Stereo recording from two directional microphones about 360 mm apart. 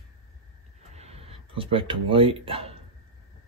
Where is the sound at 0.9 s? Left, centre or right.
Centre.